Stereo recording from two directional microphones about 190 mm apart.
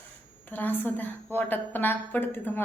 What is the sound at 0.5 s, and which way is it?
A woman's voice, 10° left (ahead or behind).